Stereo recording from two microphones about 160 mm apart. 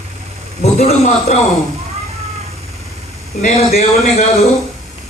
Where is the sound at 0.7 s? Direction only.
45° left (ahead or behind).